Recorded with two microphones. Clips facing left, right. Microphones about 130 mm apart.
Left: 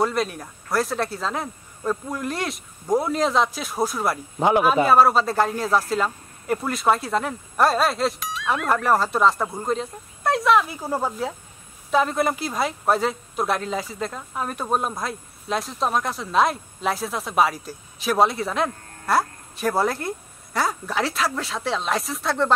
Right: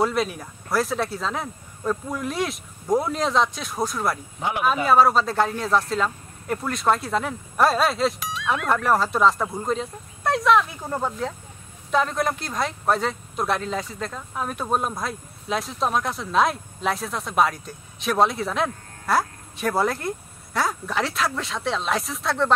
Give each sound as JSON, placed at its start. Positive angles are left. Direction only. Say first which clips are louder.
{"t": 0.0, "sound": "speech", "louder": "even", "side_deg": 0}
{"t": 4.4, "sound": "speech", "louder": "left 12 dB", "side_deg": 40}
{"t": 4.8, "sound": "speech", "louder": "left 1 dB", "side_deg": 0}